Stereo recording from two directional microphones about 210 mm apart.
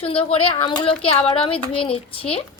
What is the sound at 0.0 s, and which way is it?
A woman's voice, 25° left (ahead or behind).